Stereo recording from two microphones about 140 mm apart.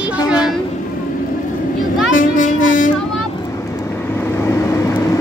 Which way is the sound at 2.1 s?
70° left (ahead or behind).